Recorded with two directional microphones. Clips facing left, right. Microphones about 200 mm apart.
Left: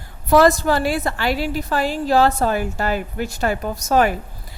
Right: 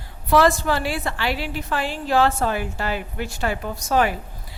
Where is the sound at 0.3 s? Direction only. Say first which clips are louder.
Left 4 dB; 40° left (ahead or behind).